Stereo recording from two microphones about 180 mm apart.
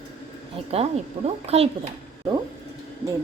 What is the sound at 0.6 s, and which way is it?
A woman's voice, 35° right (ahead or behind).